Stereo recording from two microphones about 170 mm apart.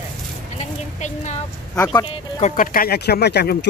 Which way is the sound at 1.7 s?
15° left (ahead or behind).